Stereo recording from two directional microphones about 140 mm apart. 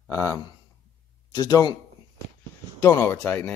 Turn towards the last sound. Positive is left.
turn(degrees=15)  # may be behind; listen again after turning